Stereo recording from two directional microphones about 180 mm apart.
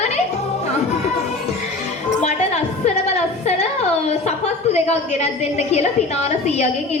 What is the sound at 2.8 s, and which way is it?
Music, 40° left (ahead or behind).